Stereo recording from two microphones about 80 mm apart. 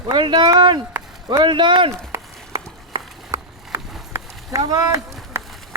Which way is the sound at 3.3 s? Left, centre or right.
Right.